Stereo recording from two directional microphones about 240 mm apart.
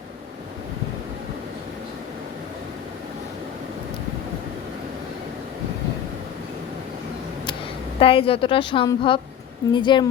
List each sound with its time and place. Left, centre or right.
7.9 s a woman's voice: left